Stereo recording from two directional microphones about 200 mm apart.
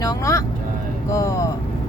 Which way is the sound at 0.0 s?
15° left (ahead or behind).